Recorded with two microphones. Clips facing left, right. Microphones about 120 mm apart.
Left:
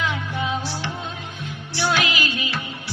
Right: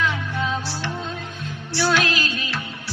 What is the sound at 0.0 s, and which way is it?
Music, 15° left (ahead or behind).